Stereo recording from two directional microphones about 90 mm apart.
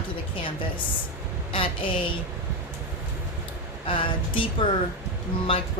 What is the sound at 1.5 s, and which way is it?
Speech, 75° left (ahead or behind).